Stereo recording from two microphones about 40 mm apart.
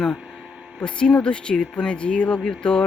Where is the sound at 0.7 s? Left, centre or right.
Left.